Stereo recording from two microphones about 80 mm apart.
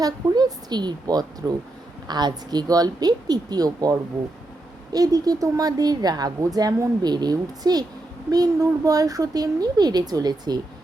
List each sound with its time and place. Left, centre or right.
0.0 s a woman's voice: right